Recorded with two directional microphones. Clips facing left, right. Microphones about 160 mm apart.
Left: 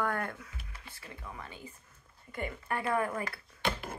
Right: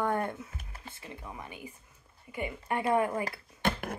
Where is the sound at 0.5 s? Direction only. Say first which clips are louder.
Right 4 dB; 45° right (ahead or behind).